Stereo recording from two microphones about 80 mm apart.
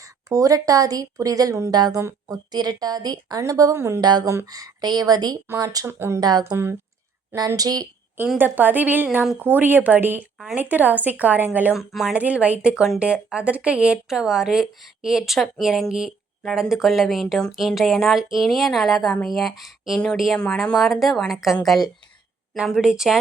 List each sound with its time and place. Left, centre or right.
0.0 s speech: right
4.0 s speech: right
5.8 s speech: right
6.1 s speech: right
8.4 s a woman's voice: right
11.7 s speech: centre
12.1 s a woman's voice: centre
20.4 s speech: centre